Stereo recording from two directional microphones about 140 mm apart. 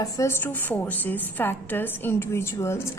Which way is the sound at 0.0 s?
20° left (ahead or behind).